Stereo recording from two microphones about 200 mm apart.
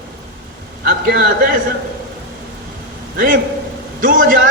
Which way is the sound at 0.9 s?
50° right (ahead or behind).